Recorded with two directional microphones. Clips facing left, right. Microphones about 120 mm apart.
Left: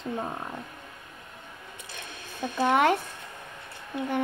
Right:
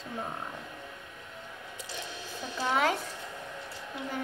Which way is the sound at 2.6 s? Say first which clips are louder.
Left 6 dB; 55° left (ahead or behind).